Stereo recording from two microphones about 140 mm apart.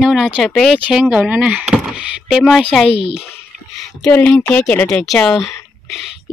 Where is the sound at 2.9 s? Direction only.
40° left (ahead or behind).